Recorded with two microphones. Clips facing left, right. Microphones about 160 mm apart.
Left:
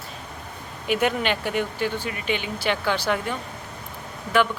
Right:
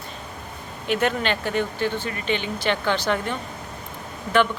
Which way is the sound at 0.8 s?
10° left (ahead or behind).